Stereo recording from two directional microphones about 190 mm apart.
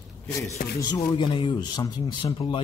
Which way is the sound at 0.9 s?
25° left (ahead or behind).